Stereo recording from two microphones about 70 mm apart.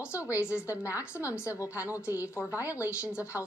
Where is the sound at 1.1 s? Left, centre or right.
Left.